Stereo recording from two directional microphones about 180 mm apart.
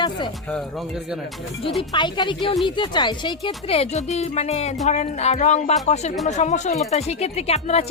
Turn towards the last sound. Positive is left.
turn(degrees=35)  # may be behind; listen again after turning